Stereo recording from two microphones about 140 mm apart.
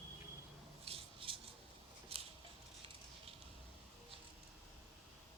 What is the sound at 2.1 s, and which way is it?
Scissors, 45° right (ahead or behind).